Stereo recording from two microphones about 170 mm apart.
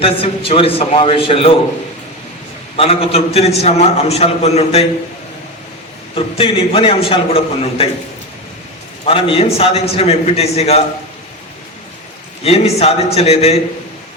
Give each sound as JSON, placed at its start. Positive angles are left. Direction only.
{"t": 0.0, "sound": "a man's voice", "side_deg": 35}
{"t": 2.7, "sound": "a man's voice", "side_deg": 35}
{"t": 6.1, "sound": "a man's voice", "side_deg": 35}
{"t": 9.0, "sound": "a man's voice", "side_deg": 35}
{"t": 12.4, "sound": "a man's voice", "side_deg": 35}